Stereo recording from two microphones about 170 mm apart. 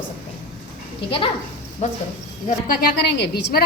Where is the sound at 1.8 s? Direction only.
45° left (ahead or behind).